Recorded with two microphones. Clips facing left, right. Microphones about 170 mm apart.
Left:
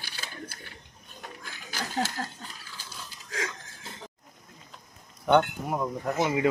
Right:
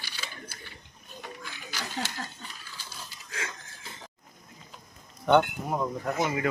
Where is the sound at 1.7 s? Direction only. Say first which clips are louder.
Left 5 dB; 45° left (ahead or behind).